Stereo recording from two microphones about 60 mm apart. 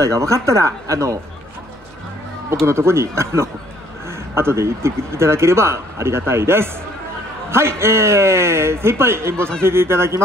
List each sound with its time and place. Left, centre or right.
0.0 s speech: right
2.6 s speech: right